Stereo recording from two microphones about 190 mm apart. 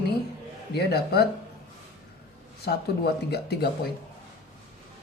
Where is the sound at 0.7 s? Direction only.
60° left (ahead or behind).